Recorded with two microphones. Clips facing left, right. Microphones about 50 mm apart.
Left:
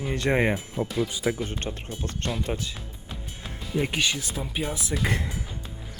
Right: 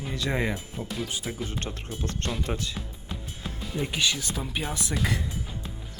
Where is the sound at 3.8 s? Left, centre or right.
Left.